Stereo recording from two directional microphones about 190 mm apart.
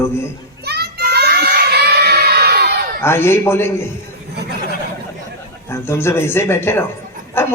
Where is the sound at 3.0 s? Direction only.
15° left (ahead or behind).